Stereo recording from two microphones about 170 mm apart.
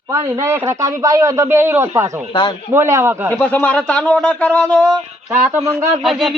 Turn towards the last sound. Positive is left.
turn(degrees=-15)  # may be behind; listen again after turning